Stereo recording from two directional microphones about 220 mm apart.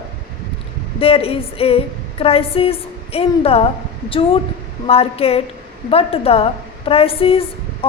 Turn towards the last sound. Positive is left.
turn(degrees=25)  # may be behind; listen again after turning